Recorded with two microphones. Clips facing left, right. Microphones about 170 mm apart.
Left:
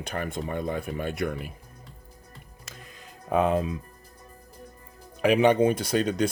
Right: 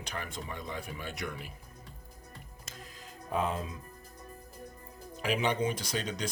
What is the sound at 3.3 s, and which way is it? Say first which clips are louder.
Speech: left 9 dB; 65° left (ahead or behind).